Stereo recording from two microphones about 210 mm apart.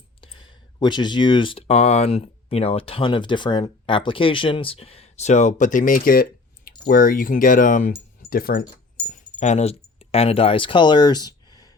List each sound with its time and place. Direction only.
0.2 s speech: 25° left (ahead or behind); by 8.6 s 45° left (ahead or behind)
9.0 s speech: 35° left (ahead or behind); by 11.7 s 20° left (ahead or behind)